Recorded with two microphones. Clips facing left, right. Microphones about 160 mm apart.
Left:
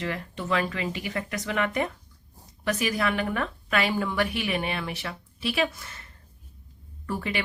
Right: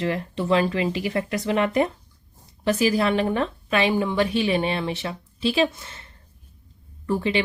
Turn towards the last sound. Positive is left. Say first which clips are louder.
# right 7 dB
turn(degrees=-25)  # may be behind; listen again after turning